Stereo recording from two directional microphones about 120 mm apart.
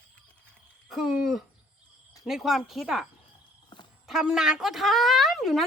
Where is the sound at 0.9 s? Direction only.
Centre (ahead or behind).